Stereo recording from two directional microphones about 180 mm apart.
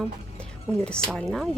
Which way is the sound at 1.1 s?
Centre (ahead or behind).